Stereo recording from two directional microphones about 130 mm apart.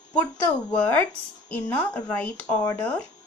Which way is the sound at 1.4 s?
15° left (ahead or behind).